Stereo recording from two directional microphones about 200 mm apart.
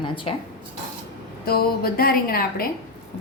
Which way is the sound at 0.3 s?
25° left (ahead or behind).